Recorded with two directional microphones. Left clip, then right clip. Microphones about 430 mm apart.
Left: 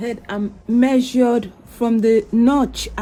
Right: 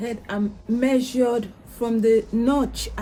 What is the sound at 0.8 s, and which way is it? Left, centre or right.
A woman's voice, centre.